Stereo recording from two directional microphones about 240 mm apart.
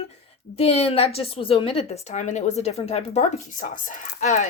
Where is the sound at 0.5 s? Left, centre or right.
Left.